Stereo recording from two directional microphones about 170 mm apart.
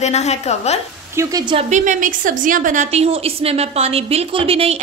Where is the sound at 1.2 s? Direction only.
20° right (ahead or behind).